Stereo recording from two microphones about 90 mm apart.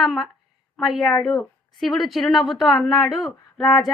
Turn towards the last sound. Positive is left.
turn(degrees=0)  # may be behind; listen again after turning